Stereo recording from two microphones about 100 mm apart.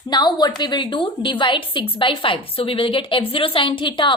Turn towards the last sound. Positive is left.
turn(degrees=55)  # may be behind; listen again after turning